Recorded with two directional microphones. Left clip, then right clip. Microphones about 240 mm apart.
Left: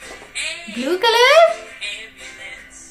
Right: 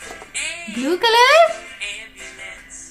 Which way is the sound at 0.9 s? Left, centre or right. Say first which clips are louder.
Even; centre.